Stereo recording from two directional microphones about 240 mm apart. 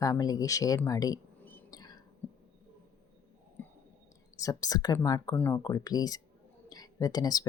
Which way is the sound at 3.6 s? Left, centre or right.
Centre.